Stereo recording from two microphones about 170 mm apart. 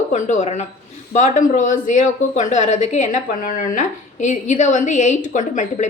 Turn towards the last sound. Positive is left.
turn(degrees=45)  # may be behind; listen again after turning